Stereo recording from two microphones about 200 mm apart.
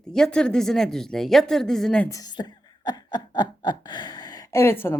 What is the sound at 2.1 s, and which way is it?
Speech, 20° left (ahead or behind).